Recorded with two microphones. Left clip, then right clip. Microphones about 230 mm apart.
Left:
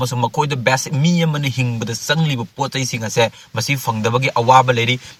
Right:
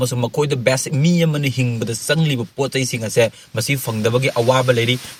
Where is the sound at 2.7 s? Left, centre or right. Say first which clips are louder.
Right 2 dB; centre.